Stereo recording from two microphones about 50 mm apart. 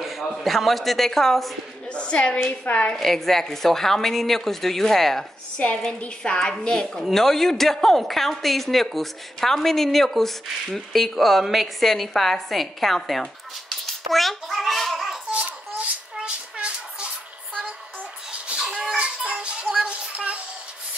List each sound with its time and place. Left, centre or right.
0.2 s a woman's voice: centre
1.9 s a woman's voice: left
3.0 s a woman's voice: centre
6.2 s a woman's voice: centre
7.0 s a woman's voice: centre
15.3 s a sound: right
16.2 s music: right
18.5 s a sound: centre
19.2 s child singing: right